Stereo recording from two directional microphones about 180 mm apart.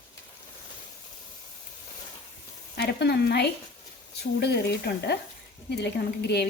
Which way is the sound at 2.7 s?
65° left (ahead or behind).